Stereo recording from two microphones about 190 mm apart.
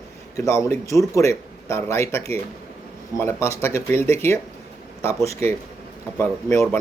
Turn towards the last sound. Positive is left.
turn(degrees=15)  # may be behind; listen again after turning